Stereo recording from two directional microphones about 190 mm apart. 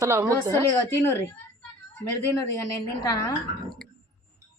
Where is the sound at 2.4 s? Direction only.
15° left (ahead or behind).